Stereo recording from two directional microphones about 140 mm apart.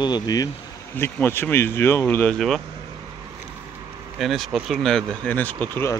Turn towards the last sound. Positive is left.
turn(degrees=15)  # may be behind; listen again after turning